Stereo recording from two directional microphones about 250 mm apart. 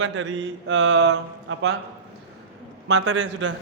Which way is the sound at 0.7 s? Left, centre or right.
Right.